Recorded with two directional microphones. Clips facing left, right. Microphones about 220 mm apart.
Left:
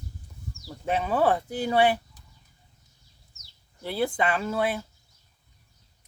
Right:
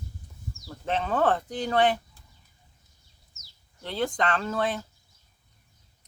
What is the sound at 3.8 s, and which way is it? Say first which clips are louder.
Speech: left 1 dB; 10° left (ahead or behind).